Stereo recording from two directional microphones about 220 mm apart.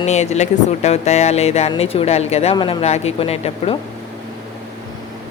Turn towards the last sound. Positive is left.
turn(degrees=25)  # may be behind; listen again after turning